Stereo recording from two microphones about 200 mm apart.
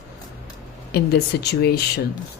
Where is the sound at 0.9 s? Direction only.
55° left (ahead or behind).